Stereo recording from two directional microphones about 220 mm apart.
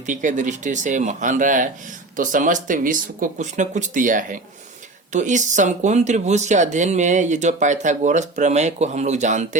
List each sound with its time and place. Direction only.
0.0 s speech: 35° right (ahead or behind)